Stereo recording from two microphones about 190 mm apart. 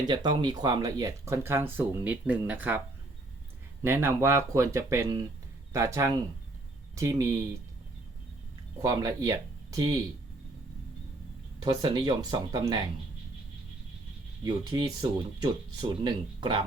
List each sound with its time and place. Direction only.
0.1 s speech: 25° right (ahead or behind)
3.8 s speech: 10° right (ahead or behind)
8.8 s speech: 20° right (ahead or behind)
11.6 s speech: 20° right (ahead or behind)
14.4 s speech: 20° right (ahead or behind)